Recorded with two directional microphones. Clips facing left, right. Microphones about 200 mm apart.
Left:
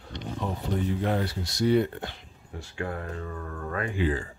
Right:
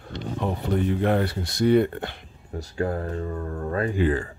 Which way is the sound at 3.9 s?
60° right (ahead or behind).